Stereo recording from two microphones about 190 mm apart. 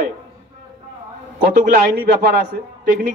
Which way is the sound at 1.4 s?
45° right (ahead or behind).